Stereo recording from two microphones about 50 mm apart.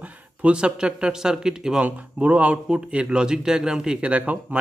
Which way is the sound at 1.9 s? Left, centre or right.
Right.